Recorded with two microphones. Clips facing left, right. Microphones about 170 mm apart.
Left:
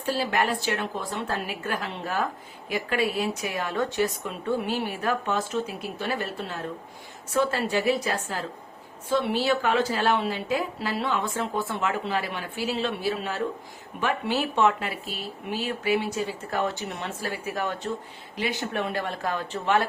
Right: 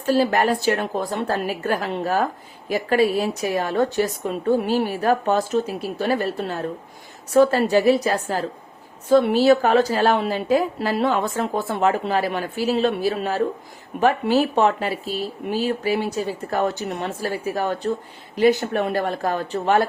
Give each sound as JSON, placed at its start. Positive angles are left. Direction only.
{"t": 0.0, "sound": "a woman's voice", "side_deg": -40}